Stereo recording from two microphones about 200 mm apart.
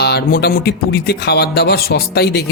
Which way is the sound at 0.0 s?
55° left (ahead or behind).